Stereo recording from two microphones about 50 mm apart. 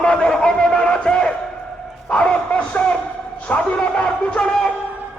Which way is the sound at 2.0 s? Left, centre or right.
Centre.